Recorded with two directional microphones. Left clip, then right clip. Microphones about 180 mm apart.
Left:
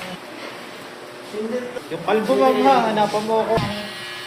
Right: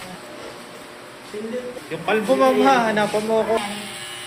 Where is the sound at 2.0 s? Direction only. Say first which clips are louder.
Even; 20° right (ahead or behind).